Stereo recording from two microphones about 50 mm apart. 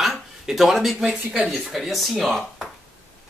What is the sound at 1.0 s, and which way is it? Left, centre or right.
Speech, centre.